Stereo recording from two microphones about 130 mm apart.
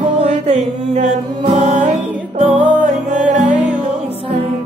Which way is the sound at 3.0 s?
70° right (ahead or behind).